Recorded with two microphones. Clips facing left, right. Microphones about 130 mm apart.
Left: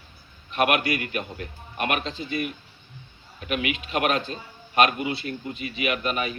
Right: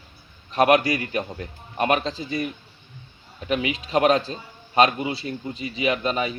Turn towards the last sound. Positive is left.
turn(degrees=-30)  # may be behind; listen again after turning